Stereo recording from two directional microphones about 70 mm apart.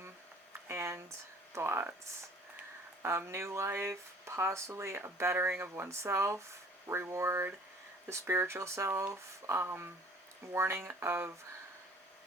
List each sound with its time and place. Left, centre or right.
0.7 s a sound: right
1.5 s speech: right
3.0 s speech: right
5.4 s speech: right